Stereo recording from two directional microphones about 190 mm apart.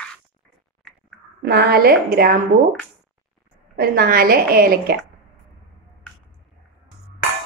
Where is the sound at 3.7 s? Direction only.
55° right (ahead or behind).